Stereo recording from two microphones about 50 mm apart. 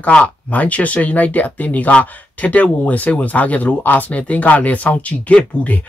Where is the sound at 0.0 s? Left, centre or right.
Left.